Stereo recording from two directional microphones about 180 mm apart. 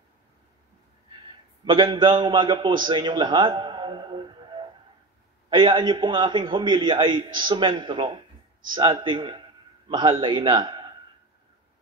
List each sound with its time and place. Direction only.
1.7 s a man's voice: 25° right (ahead or behind)